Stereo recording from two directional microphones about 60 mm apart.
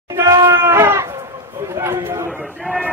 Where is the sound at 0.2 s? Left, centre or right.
Right.